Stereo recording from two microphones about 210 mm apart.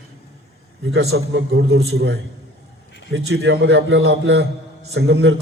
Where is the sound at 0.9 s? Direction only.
55° right (ahead or behind).